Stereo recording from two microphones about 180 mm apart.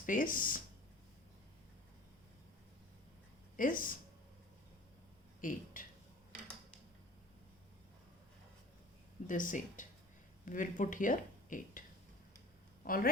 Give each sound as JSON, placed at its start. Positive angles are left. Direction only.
{"t": 0.0, "sound": "speech", "side_deg": 50}
{"t": 3.6, "sound": "speech", "side_deg": 50}
{"t": 5.4, "sound": "speech", "side_deg": 50}
{"t": 9.2, "sound": "speech", "side_deg": 45}